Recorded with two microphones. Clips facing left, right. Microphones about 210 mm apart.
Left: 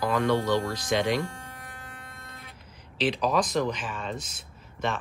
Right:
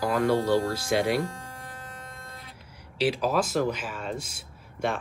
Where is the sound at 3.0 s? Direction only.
5° right (ahead or behind).